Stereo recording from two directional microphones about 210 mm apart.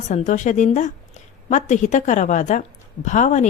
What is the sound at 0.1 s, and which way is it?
Speech, 35° left (ahead or behind).